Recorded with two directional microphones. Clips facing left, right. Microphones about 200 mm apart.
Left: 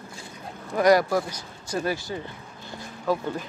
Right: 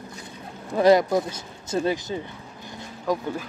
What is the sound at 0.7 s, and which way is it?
Speech, 20° right (ahead or behind).